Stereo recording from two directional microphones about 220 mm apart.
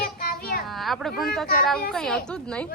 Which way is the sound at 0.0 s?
40° left (ahead or behind).